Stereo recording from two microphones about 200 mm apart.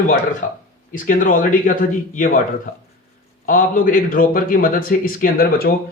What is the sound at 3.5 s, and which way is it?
A man's voice, 45° left (ahead or behind).